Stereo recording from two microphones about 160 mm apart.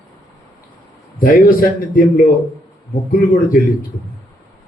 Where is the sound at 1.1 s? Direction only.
60° left (ahead or behind).